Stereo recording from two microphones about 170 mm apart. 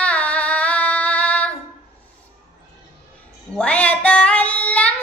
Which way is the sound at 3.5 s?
5° left (ahead or behind).